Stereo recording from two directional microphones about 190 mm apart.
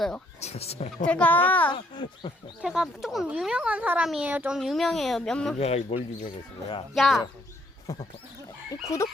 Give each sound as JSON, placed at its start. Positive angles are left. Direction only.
{"t": 0.3, "sound": "speech", "side_deg": 35}
{"t": 1.0, "sound": "speech", "side_deg": 5}
{"t": 1.7, "sound": "speech", "side_deg": 25}
{"t": 2.6, "sound": "speech", "side_deg": -5}
{"t": 5.5, "sound": "speech", "side_deg": 35}
{"t": 6.9, "sound": "speech", "side_deg": 0}
{"t": 7.9, "sound": "speech", "side_deg": 20}